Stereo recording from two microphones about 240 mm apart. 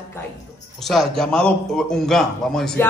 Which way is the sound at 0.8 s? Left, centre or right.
Centre.